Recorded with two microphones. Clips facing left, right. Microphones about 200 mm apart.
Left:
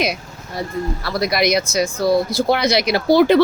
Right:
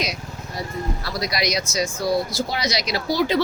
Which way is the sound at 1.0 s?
55° left (ahead or behind).